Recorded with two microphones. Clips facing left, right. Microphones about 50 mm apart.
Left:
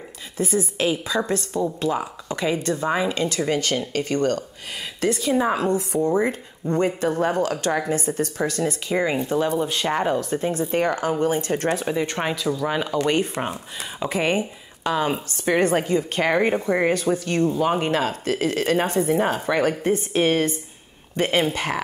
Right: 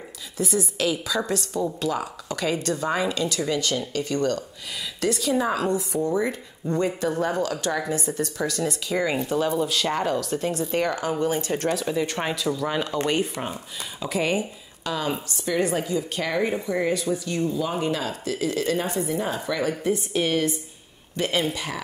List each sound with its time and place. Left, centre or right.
0.4 s speech: left
2.0 s speech: left
2.9 s speech: centre
3.2 s speech: left
11.9 s speech: centre
13.5 s speech: left
15.4 s a woman's voice: left